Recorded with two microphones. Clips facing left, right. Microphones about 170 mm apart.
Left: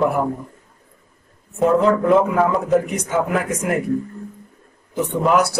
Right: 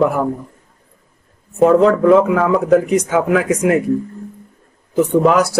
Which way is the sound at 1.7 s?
90° right.